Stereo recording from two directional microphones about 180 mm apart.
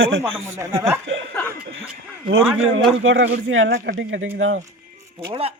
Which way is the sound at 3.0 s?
90° right.